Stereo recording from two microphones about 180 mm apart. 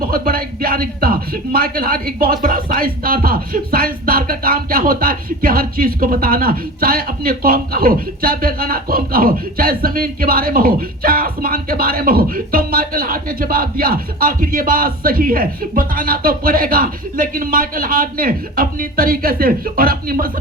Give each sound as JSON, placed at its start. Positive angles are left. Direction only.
{"t": 0.0, "sound": "speech", "side_deg": -55}